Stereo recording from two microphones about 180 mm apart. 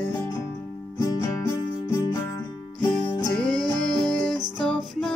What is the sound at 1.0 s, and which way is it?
Music, 15° left (ahead or behind).